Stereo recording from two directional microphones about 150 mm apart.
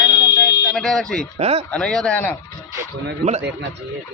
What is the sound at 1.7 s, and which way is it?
Speech, 5° left (ahead or behind).